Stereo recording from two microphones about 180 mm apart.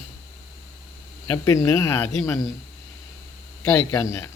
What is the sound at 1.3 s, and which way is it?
Speech, 15° left (ahead or behind).